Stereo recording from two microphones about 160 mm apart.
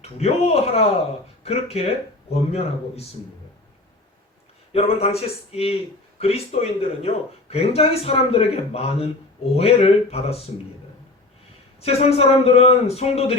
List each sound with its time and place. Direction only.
0.0 s speech: 40° left (ahead or behind)
4.7 s speech: 40° left (ahead or behind)
11.8 s speech: 40° left (ahead or behind)